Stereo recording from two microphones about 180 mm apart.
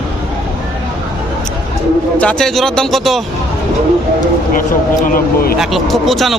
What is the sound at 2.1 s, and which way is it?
Speech, 5° left (ahead or behind).